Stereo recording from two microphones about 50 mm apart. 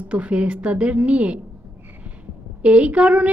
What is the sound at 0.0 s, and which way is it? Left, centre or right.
A woman's voice, right.